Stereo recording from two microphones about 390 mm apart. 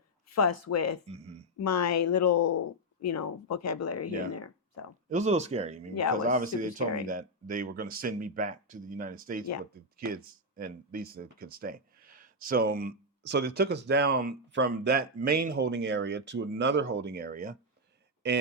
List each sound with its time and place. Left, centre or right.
0.3 s speech: left
1.0 s speech: centre
1.6 s speech: left
5.0 s speech: centre